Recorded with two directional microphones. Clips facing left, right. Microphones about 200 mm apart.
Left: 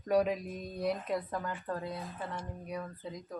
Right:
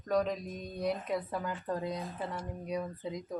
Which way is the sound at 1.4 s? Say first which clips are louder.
Right 2 dB; 15° right (ahead or behind).